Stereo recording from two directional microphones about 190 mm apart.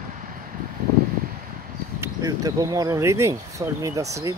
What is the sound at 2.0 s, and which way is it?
Speech, 20° right (ahead or behind).